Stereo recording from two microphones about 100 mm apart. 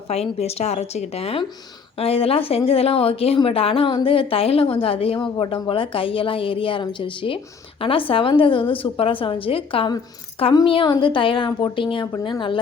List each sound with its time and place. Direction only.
0.1 s a woman's voice: 90° left
2.0 s a woman's voice: 75° left (ahead or behind); by 12.0 s 60° left (ahead or behind)